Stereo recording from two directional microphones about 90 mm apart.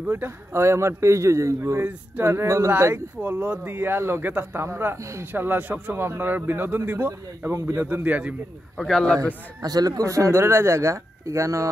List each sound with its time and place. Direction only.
0.1 s a man's voice: 25° right (ahead or behind)
3.2 s a man's voice: 15° right (ahead or behind)
8.7 s speech: 5° left (ahead or behind)
9.6 s a man's voice: 45° right (ahead or behind)